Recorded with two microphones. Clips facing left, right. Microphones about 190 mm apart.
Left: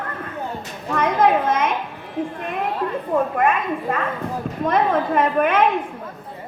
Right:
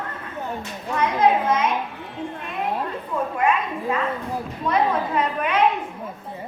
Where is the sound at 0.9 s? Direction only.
50° left (ahead or behind).